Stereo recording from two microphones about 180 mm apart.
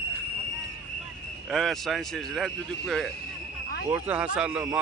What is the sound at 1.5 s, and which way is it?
A man's voice, centre (ahead or behind).